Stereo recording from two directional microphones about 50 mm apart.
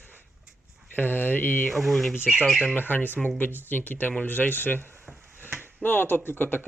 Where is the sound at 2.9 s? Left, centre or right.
Left.